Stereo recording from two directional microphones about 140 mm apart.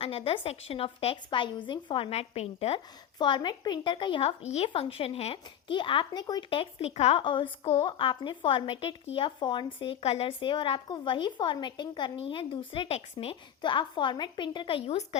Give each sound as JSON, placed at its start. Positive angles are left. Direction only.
{"t": 0.0, "sound": "speech", "side_deg": 45}
{"t": 3.2, "sound": "a woman's voice", "side_deg": 35}